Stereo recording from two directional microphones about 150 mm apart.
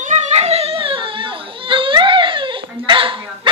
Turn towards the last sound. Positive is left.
turn(degrees=-35)  # may be behind; listen again after turning